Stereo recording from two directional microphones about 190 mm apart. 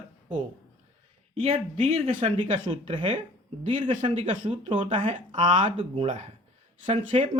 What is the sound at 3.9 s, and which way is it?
Speech, 40° right (ahead or behind).